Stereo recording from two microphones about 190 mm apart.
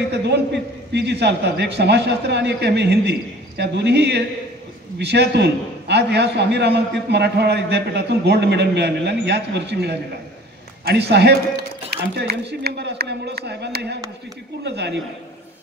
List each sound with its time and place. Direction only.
0.1 s a man's voice: 65° right (ahead or behind)